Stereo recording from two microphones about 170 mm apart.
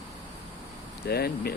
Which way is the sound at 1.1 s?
70° left (ahead or behind).